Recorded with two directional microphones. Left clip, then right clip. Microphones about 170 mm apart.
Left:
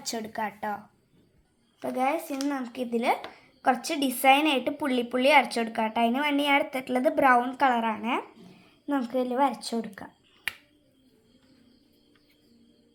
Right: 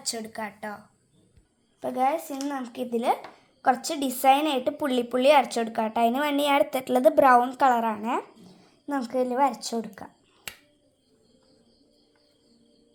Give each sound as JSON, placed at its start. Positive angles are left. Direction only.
{"t": 0.0, "sound": "speech", "side_deg": 40}
{"t": 1.8, "sound": "a woman's voice", "side_deg": -25}